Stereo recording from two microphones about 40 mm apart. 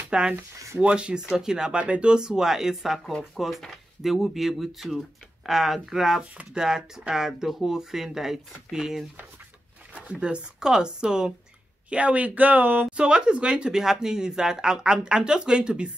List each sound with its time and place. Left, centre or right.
0.1 s speech: right
1.3 s speech: centre
9.9 s speech: right
11.9 s speech: right
12.9 s speech: right